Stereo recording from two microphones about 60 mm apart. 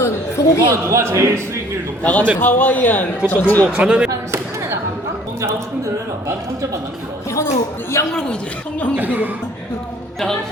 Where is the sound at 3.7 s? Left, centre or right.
Centre.